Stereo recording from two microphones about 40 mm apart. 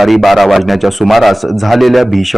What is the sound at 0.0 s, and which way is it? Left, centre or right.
Speech, centre.